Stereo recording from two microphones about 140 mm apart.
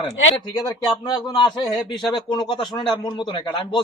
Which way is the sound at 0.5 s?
25° left (ahead or behind).